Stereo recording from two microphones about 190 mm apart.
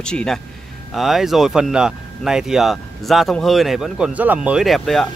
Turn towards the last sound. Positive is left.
turn(degrees=0)  # may be behind; listen again after turning